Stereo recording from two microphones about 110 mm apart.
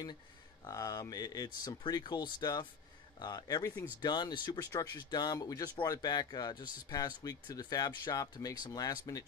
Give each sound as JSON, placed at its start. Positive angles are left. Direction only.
{"t": 0.7, "sound": "speech", "side_deg": 30}